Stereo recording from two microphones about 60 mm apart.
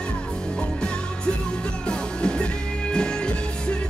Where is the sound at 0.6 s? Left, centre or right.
Centre.